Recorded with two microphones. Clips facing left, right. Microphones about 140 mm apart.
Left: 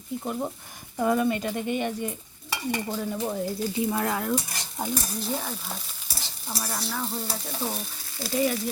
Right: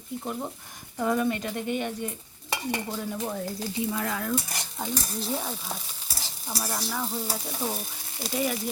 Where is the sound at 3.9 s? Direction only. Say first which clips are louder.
Left 3 dB; 40° left (ahead or behind).